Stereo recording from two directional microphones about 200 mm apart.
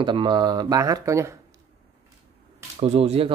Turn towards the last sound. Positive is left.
turn(degrees=-30)  # may be behind; listen again after turning